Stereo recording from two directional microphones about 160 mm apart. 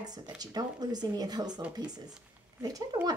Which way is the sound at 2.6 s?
25° right (ahead or behind).